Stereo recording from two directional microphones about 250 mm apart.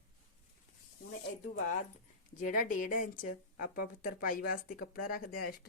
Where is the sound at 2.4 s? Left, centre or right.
Left.